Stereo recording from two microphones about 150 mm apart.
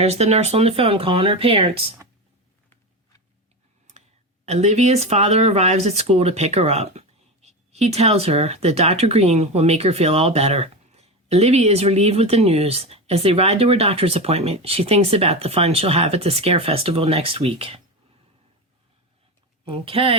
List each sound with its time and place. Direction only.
0.0 s speech: 45° right (ahead or behind)
4.4 s speech: 45° right (ahead or behind)
19.6 s speech: 40° right (ahead or behind)